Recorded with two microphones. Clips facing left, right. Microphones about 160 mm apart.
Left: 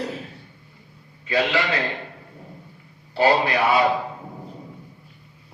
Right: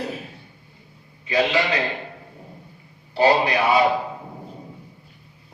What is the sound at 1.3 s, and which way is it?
Speech, 20° right (ahead or behind).